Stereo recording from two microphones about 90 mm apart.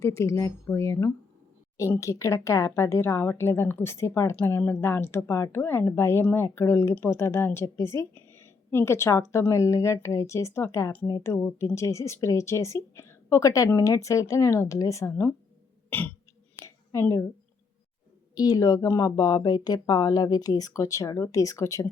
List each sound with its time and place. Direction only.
0.0 s a woman's voice: 30° left (ahead or behind)
15.9 s burping: 20° left (ahead or behind)
16.6 s a sound: 30° left (ahead or behind)
18.3 s a woman's voice: 45° left (ahead or behind)